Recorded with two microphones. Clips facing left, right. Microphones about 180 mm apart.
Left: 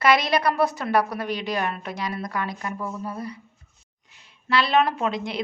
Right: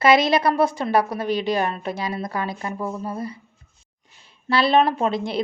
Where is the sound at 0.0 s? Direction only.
25° right (ahead or behind).